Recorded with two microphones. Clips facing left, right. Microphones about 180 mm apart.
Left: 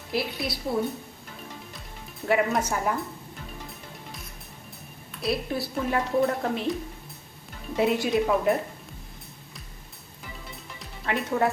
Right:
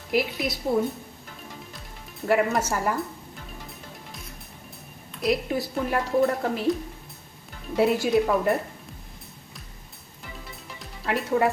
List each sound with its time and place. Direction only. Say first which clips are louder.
0.1 s a woman's voice: right 4 dB; 20° right (ahead or behind)
2.2 s speech: right 1 dB; centre (ahead or behind)
5.2 s a woman's voice: right 3 dB; 15° right (ahead or behind)
5.7 s speech: even; 5° right (ahead or behind)
7.8 s speech: right 2 dB; 5° right (ahead or behind)
10.8 s music: right 1 dB; 5° right (ahead or behind)